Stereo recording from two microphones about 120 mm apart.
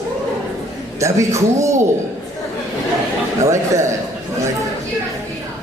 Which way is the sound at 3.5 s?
25° right (ahead or behind).